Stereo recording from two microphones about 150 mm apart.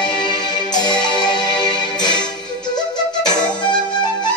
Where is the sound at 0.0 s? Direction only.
30° left (ahead or behind).